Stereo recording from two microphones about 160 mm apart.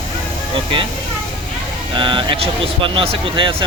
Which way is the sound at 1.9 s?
30° right (ahead or behind).